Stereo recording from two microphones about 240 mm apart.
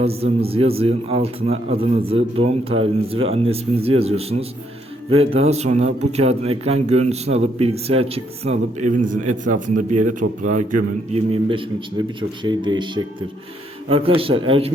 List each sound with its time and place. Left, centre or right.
0.0 s speech: right